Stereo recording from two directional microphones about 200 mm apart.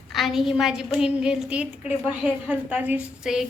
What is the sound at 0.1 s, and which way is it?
A woman's voice, centre (ahead or behind).